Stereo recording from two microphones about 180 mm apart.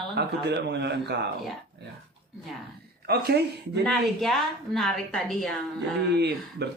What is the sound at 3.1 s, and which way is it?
Speech, 65° right (ahead or behind).